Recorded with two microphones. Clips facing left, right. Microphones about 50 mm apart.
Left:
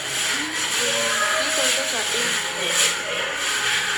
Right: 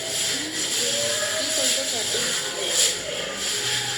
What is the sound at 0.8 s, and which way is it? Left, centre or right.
Hiss, left.